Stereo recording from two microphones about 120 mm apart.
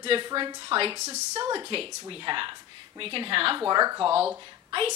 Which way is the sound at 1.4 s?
40° right (ahead or behind).